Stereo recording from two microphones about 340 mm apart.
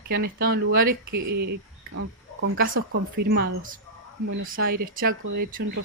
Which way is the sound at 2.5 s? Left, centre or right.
Right.